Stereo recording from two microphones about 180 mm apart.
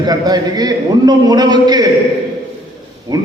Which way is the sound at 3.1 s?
25° right (ahead or behind).